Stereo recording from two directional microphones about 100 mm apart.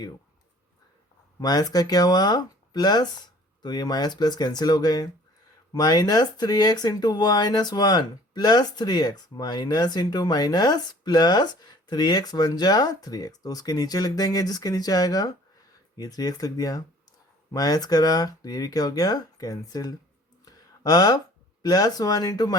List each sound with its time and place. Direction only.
1.4 s speech: 40° left (ahead or behind)
20.4 s a sound: 40° left (ahead or behind)
21.6 s speech: 40° left (ahead or behind)